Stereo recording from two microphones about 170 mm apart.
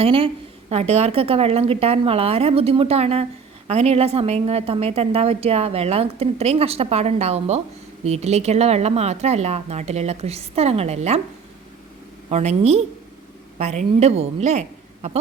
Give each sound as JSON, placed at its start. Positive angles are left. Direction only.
{"t": 0.0, "sound": "a woman's voice", "side_deg": -35}
{"t": 12.3, "sound": "a woman's voice", "side_deg": -40}